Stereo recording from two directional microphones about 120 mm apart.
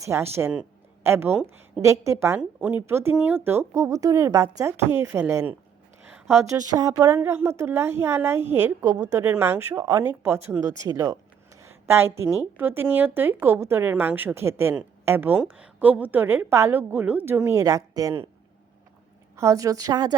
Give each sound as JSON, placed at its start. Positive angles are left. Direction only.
{"t": 0.0, "sound": "a woman's voice", "side_deg": -25}
{"t": 10.8, "sound": "a sound", "side_deg": -30}
{"t": 12.5, "sound": "a woman's voice", "side_deg": -20}
{"t": 19.4, "sound": "speech", "side_deg": -25}